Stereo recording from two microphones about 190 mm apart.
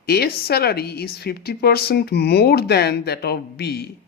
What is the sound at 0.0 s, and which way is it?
A woman's voice, 55° left (ahead or behind).